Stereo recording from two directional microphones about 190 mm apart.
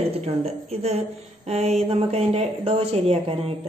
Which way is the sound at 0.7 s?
35° right (ahead or behind).